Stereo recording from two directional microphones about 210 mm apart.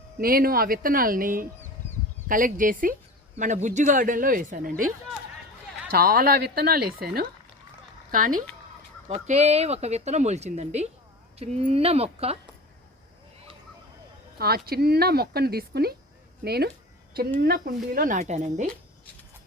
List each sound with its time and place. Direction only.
0.2 s speech: 45° right (ahead or behind)
5.9 s speech: 45° right (ahead or behind)
9.0 s a woman's voice: 35° right (ahead or behind)
14.3 s speech: 45° right (ahead or behind)